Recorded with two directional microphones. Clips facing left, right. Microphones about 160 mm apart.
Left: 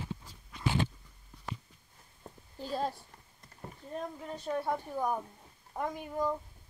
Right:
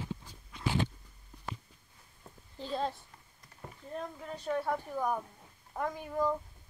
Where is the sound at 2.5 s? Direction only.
10° left (ahead or behind).